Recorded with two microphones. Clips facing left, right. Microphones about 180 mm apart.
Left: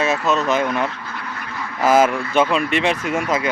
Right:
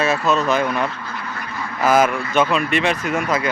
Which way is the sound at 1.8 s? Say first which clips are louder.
Left 1 dB; 25° left (ahead or behind).